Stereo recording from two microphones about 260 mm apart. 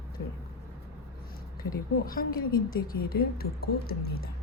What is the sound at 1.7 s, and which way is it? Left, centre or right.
A woman's voice, left.